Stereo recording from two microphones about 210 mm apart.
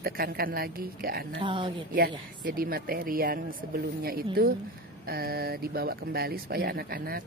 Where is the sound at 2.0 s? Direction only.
45° right (ahead or behind).